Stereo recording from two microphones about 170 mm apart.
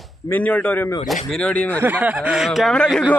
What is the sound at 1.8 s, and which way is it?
A man's voice, 10° right (ahead or behind).